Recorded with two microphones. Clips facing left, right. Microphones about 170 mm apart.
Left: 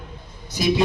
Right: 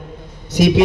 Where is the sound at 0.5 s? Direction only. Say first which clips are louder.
Right 7 dB; 75° right (ahead or behind).